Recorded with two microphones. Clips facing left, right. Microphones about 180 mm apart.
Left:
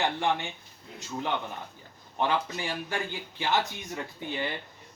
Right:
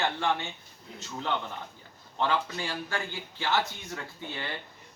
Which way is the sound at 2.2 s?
15° left (ahead or behind).